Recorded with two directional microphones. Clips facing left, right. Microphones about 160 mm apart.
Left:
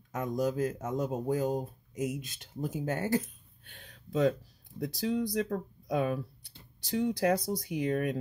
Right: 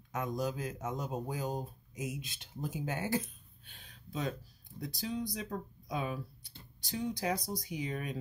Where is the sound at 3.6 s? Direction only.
80° left.